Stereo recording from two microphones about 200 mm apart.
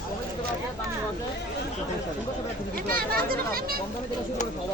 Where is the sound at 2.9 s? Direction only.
45° right (ahead or behind).